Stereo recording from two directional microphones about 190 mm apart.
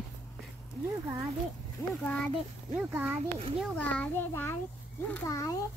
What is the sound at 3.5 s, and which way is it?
A child's voice, 5° left (ahead or behind).